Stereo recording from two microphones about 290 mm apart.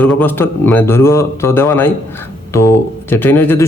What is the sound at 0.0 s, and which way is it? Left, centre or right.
Speech, centre.